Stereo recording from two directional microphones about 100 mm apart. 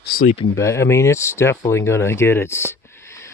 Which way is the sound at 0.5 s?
30° left (ahead or behind).